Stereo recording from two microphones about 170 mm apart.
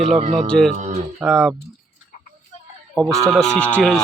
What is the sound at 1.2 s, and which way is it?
Speech, centre (ahead or behind).